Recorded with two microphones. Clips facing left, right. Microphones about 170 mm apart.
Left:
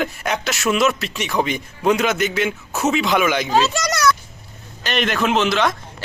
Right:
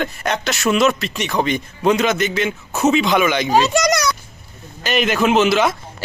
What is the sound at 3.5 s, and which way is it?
Speech, 15° right (ahead or behind).